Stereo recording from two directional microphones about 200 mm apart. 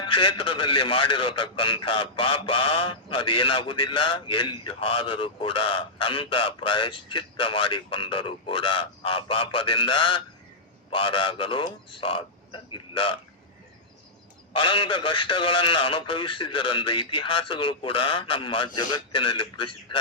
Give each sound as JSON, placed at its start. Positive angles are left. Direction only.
{"t": 0.0, "sound": "a man's voice", "side_deg": 25}
{"t": 14.5, "sound": "a man's voice", "side_deg": 25}